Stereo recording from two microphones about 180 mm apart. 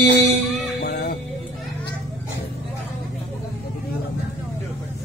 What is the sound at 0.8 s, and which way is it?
Music, 50° left (ahead or behind).